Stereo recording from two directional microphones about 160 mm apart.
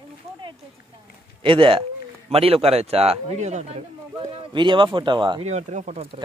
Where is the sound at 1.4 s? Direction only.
35° right (ahead or behind).